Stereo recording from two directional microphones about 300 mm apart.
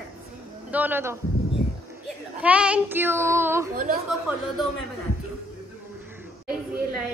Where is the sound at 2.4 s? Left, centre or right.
Centre.